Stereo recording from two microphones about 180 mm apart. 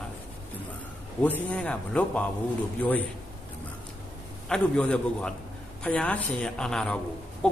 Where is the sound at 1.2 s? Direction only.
10° left (ahead or behind).